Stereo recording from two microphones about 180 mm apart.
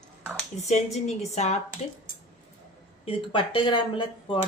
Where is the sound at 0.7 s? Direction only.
40° left (ahead or behind).